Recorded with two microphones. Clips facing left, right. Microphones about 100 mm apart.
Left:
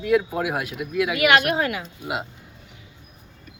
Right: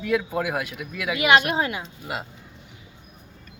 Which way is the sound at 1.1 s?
20° right (ahead or behind).